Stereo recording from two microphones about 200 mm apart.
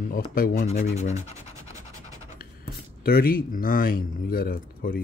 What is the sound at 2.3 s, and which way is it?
Speech, 50° left (ahead or behind).